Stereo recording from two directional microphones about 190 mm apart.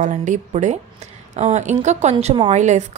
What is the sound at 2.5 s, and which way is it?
Speech, 40° right (ahead or behind).